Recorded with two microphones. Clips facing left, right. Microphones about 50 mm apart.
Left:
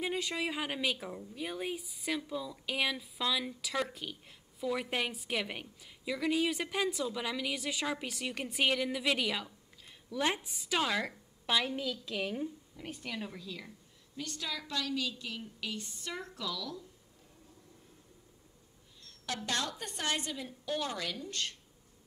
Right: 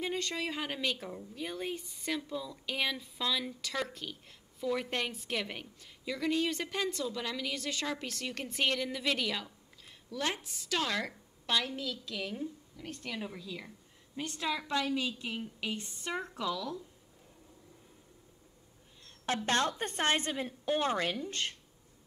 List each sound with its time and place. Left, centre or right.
0.0 s a woman's voice: centre
13.1 s a woman's voice: centre
14.1 s a woman's voice: right
19.0 s a woman's voice: right